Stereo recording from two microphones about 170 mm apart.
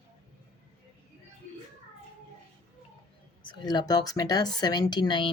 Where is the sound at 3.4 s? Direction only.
25° left (ahead or behind).